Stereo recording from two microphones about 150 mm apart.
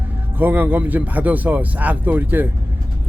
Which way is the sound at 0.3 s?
10° right (ahead or behind).